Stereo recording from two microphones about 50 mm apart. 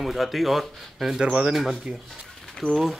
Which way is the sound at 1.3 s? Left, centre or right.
Centre.